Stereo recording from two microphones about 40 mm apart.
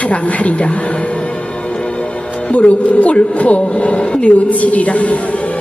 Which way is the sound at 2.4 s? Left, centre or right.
Left.